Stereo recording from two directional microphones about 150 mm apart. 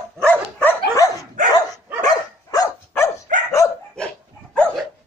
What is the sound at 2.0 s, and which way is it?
Dog, 25° left (ahead or behind).